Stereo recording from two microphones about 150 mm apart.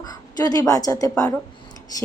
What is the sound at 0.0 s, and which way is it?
A woman's voice, 25° left (ahead or behind).